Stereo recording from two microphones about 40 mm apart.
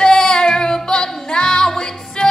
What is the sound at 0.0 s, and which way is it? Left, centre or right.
Music, centre.